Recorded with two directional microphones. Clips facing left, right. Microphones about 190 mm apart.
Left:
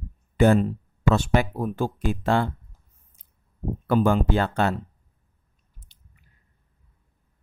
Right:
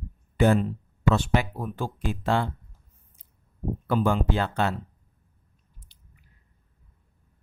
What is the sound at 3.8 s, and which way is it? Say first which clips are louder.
Speech: left 4 dB; 50° left (ahead or behind).